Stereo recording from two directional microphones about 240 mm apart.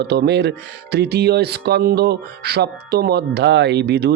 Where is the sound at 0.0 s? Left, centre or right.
Right.